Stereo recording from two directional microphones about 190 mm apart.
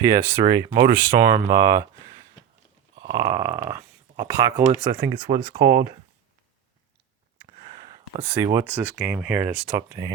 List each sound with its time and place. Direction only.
0.1 s speech: 20° right (ahead or behind)
3.0 s speech: 20° right (ahead or behind)
5.5 s speech: 50° right (ahead or behind)
8.5 s speech: 10° right (ahead or behind)